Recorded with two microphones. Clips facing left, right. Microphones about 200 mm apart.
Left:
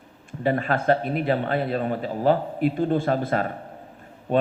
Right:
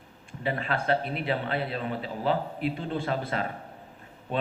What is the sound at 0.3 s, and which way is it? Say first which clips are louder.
Speech: left 7 dB; 45° left (ahead or behind).